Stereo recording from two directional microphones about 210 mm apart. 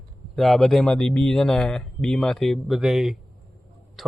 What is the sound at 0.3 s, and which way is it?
Speech, centre (ahead or behind).